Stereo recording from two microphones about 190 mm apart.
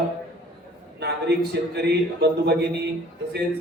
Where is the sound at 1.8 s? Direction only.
60° right (ahead or behind).